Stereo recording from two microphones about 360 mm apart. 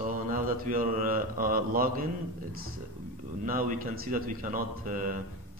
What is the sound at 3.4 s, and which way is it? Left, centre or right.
Speech, right.